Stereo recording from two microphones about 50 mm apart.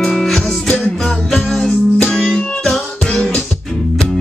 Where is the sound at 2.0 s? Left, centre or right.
Centre.